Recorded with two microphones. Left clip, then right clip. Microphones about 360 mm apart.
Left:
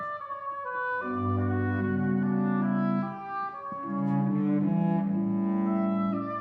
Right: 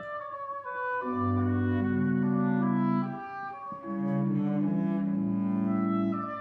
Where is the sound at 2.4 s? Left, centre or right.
Centre.